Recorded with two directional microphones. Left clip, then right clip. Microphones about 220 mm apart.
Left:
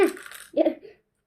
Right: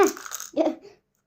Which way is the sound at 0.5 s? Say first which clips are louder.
Left 2 dB; 20° right (ahead or behind).